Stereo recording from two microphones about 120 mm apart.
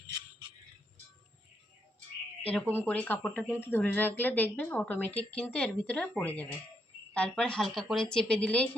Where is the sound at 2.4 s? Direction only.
10° left (ahead or behind).